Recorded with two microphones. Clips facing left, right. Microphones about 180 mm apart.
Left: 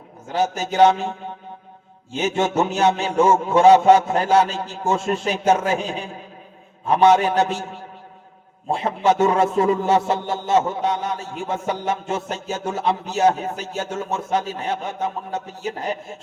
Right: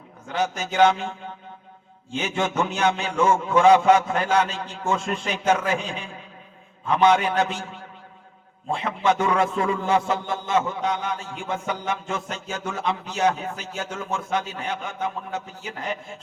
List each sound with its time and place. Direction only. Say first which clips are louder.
0.3 s a man's voice: left 4 dB; 35° left (ahead or behind)
2.1 s a man's voice: left 4 dB; 35° left (ahead or behind)
8.7 s a man's voice: left 3 dB; 35° left (ahead or behind)